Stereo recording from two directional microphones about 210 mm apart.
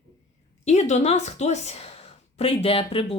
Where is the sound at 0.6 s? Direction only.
35° left (ahead or behind).